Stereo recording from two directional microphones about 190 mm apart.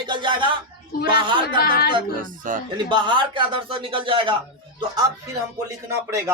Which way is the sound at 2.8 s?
25° right (ahead or behind).